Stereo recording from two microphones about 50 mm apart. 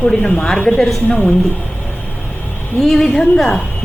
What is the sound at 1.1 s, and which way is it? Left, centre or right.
Speech, left.